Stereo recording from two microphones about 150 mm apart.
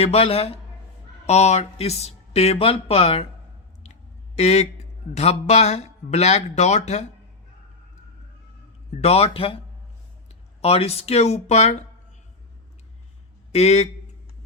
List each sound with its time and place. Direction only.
0.0 s a man's voice: 40° left (ahead or behind)
4.4 s speech: 45° left (ahead or behind)
9.0 s a man's voice: 45° left (ahead or behind)
10.6 s speech: 45° left (ahead or behind)
13.5 s speech: 45° left (ahead or behind)